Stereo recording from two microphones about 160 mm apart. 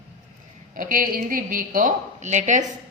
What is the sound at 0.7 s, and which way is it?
A woman's voice, 60° right (ahead or behind).